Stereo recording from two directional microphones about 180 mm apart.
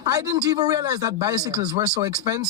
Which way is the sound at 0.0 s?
20° right (ahead or behind).